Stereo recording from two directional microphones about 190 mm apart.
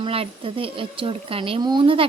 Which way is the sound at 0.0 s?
30° right (ahead or behind).